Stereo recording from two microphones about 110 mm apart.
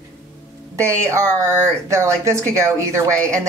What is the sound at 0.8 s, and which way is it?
A woman's voice, 25° right (ahead or behind).